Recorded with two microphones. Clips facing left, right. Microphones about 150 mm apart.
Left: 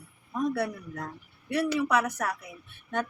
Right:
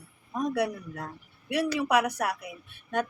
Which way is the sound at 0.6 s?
10° right (ahead or behind).